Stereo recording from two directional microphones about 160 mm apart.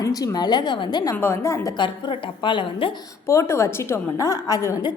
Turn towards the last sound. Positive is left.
turn(degrees=25)  # may be behind; listen again after turning